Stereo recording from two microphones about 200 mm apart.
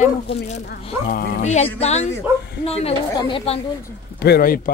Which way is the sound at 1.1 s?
50° left (ahead or behind).